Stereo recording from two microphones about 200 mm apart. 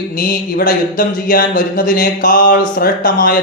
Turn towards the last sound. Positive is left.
turn(degrees=45)  # may be behind; listen again after turning